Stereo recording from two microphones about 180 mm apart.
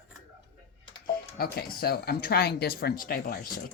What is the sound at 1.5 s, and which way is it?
Speech, 55° left (ahead or behind).